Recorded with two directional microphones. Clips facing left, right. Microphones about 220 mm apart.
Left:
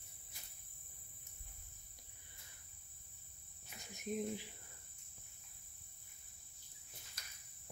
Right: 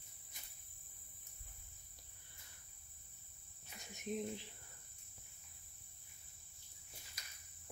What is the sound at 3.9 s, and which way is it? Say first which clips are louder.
Cricket: left 1 dB; 5° left (ahead or behind).